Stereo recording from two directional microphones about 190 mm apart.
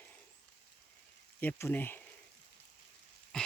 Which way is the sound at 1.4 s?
10° left (ahead or behind).